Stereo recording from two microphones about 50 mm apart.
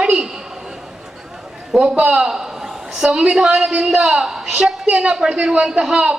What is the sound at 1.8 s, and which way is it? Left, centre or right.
Speech, right.